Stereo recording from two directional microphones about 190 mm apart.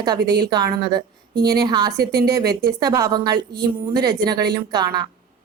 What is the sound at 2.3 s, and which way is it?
A woman's voice, 20° right (ahead or behind).